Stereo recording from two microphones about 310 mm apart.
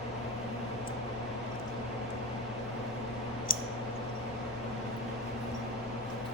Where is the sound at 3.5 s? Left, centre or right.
Left.